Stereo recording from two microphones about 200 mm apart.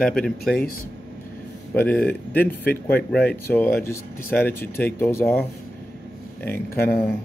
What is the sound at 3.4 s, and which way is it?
Speech, 10° left (ahead or behind).